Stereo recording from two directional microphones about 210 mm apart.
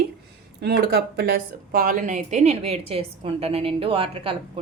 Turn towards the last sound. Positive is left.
turn(degrees=-25)  # may be behind; listen again after turning